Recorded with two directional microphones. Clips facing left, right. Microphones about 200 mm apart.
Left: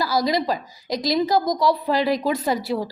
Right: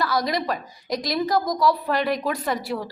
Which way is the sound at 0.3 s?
30° left (ahead or behind).